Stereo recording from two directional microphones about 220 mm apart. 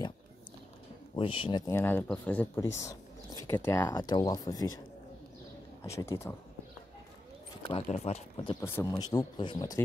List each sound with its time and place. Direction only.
1.1 s speech: 25° left (ahead or behind)
1.7 s speech: 10° left (ahead or behind)
5.9 s speech: 15° left (ahead or behind)
7.6 s speech: 30° left (ahead or behind)